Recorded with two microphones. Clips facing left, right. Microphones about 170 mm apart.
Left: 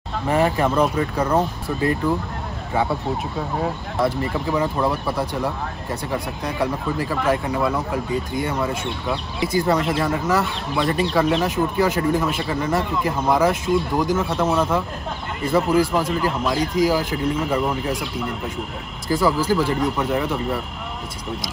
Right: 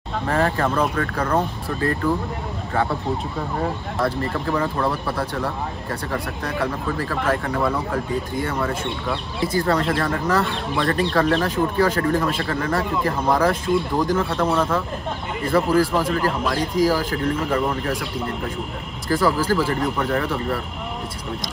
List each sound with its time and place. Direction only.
0.3 s speech: 10° left (ahead or behind)
4.0 s speech: 10° left (ahead or behind)
8.8 s speech: centre (ahead or behind)
16.1 s speech: 5° left (ahead or behind)
19.0 s speech: 10° left (ahead or behind)